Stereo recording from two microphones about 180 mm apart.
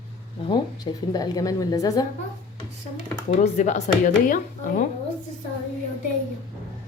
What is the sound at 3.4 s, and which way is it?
Speech, 40° left (ahead or behind).